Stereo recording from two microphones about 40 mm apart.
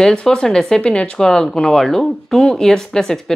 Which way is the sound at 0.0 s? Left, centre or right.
Centre.